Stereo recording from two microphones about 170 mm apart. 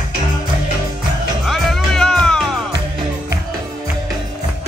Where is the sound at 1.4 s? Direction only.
Centre (ahead or behind).